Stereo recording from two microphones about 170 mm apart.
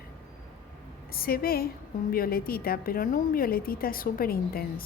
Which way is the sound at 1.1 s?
60° left (ahead or behind).